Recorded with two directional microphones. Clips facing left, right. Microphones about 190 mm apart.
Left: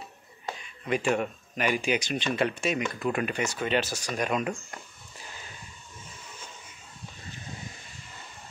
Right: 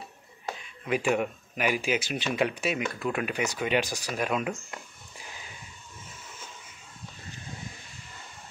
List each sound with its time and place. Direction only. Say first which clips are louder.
0.8 s speech: even; 5° right (ahead or behind)